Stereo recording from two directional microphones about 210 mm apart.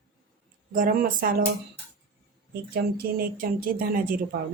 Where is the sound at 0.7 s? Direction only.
40° right (ahead or behind).